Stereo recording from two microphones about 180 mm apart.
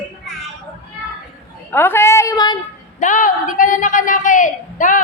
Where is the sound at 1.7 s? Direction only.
15° left (ahead or behind).